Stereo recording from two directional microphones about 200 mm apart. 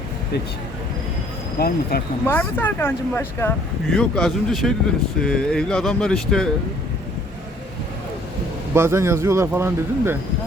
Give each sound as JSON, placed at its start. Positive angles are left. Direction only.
{"t": 1.5, "sound": "speech", "side_deg": 50}
{"t": 2.2, "sound": "speech", "side_deg": 10}
{"t": 8.7, "sound": "speech", "side_deg": -10}